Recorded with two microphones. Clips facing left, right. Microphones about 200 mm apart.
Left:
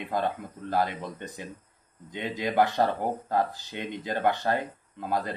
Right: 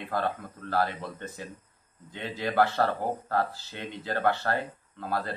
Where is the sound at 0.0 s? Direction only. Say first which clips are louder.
Left 1 dB; 15° left (ahead or behind).